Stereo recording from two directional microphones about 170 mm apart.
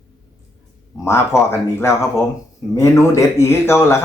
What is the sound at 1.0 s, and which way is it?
Speech, 15° left (ahead or behind).